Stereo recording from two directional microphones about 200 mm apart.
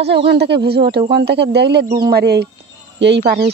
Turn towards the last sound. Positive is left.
turn(degrees=-55)  # may be behind; listen again after turning